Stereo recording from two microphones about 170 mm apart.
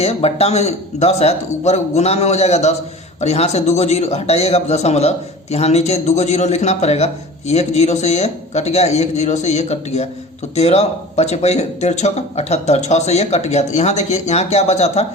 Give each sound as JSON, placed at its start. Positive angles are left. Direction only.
{"t": 0.0, "sound": "a man's voice", "side_deg": 35}